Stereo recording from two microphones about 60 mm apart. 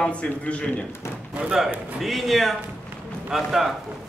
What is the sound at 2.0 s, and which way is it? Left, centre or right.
A man's voice, centre.